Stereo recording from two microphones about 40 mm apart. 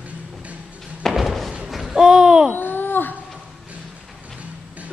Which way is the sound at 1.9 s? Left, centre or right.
Centre.